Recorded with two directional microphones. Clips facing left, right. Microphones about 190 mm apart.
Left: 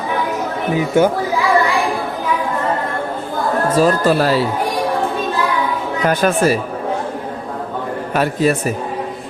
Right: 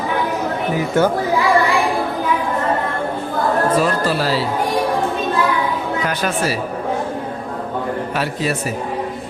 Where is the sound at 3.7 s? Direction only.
40° left (ahead or behind).